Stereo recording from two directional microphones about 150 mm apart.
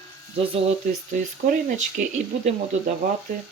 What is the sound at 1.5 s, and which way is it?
Speech, 55° right (ahead or behind).